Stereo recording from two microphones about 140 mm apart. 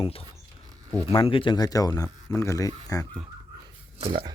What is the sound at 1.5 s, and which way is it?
Speech, 25° left (ahead or behind).